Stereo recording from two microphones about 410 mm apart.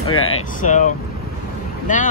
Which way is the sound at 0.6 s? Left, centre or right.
Centre.